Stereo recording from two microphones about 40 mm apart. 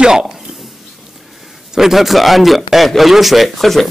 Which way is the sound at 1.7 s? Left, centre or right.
Centre.